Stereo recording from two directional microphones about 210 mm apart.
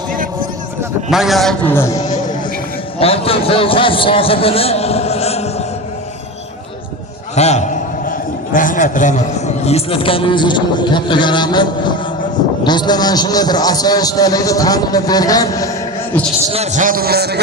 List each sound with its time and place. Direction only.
1.1 s a man's voice: centre (ahead or behind); by 5.6 s 30° left (ahead or behind)
7.3 s a sound: 30° left (ahead or behind)
8.5 s a man's voice: 40° left (ahead or behind); by 15.7 s 15° left (ahead or behind)
16.5 s a man's voice: 35° right (ahead or behind); by 17.4 s 50° right (ahead or behind)